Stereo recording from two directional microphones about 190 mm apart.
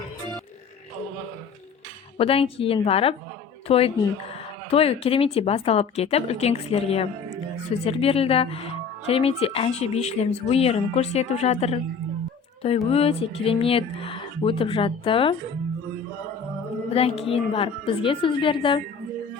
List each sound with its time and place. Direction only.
2.1 s speech: 30° left (ahead or behind)
12.9 s speech: 30° left (ahead or behind)
16.9 s speech: 30° left (ahead or behind)